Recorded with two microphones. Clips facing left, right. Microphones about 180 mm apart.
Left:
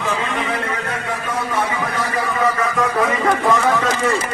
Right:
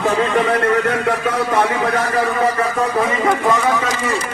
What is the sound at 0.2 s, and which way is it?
A man's voice, 60° right (ahead or behind).